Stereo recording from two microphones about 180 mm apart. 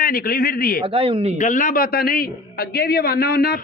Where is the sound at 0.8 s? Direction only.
30° right (ahead or behind).